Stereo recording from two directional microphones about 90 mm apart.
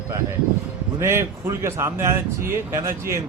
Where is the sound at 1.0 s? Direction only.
30° right (ahead or behind).